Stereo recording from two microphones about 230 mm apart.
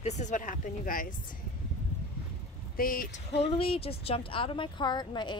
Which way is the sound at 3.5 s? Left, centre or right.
Left.